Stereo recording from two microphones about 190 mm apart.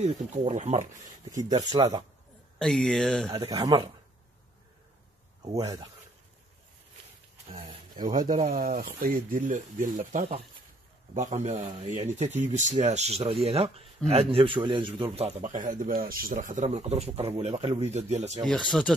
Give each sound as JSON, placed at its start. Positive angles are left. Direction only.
{"t": 0.0, "sound": "speech", "side_deg": -35}
{"t": 1.3, "sound": "speech", "side_deg": -20}
{"t": 2.6, "sound": "speech", "side_deg": 5}
{"t": 3.3, "sound": "speech", "side_deg": -20}
{"t": 5.5, "sound": "speech", "side_deg": -20}
{"t": 7.5, "sound": "a sound", "side_deg": -25}
{"t": 8.2, "sound": "speech", "side_deg": -40}
{"t": 18.5, "sound": "speech", "side_deg": 0}